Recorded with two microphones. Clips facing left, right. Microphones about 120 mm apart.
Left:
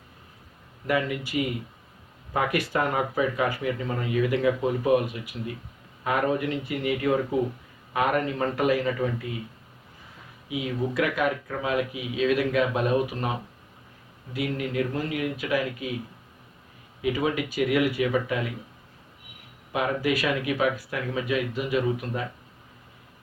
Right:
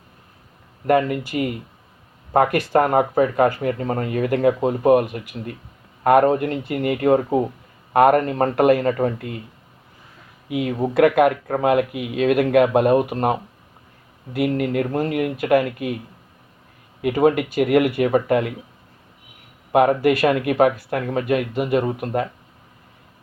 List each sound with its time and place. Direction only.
0.9 s speech: 50° right (ahead or behind)
7.9 s speech: 55° right (ahead or behind)
10.5 s speech: 55° right (ahead or behind)
14.3 s speech: 55° right (ahead or behind)
17.0 s speech: 55° right (ahead or behind)
19.7 s speech: 55° right (ahead or behind)